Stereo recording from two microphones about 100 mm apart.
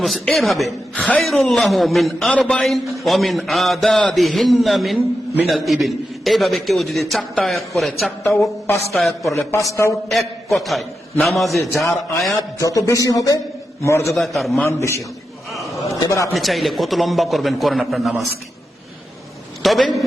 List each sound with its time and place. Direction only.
0.0 s a man's voice: centre (ahead or behind)
9.3 s music: 30° left (ahead or behind)
10.1 s a man's voice: centre (ahead or behind)
12.4 s music: 35° left (ahead or behind)
13.8 s a man's voice: 30° left (ahead or behind)
14.2 s a man's voice: centre (ahead or behind)
14.7 s a man's voice: 30° left (ahead or behind)
16.0 s music: 35° left (ahead or behind)
16.3 s a man's voice: centre (ahead or behind)
19.6 s a man's voice: centre (ahead or behind)